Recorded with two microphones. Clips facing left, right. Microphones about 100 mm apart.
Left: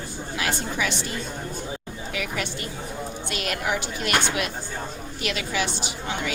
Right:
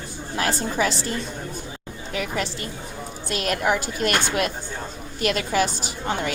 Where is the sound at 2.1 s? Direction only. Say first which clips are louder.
Right 3 dB; 40° right (ahead or behind).